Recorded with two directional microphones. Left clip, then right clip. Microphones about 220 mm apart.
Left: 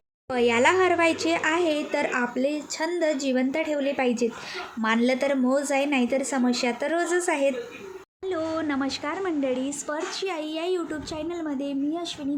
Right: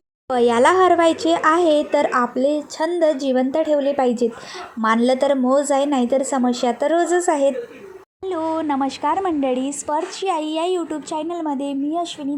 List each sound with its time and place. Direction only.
0.3 s speech: 20° right (ahead or behind)
0.5 s a woman's voice: centre (ahead or behind)
0.9 s a woman's voice: 15° right (ahead or behind)
7.1 s a woman's voice: centre (ahead or behind)
8.2 s speech: 20° right (ahead or behind)